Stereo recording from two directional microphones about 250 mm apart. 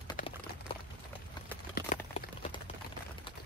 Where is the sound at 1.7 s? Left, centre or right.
Left.